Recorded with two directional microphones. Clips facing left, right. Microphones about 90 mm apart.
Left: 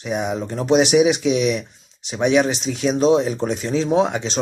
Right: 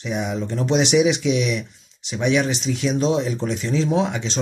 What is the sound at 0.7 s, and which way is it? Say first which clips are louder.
Speech: left 3 dB; 45° left (ahead or behind).